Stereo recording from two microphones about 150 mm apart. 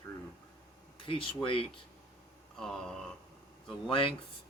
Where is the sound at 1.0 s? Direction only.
35° left (ahead or behind).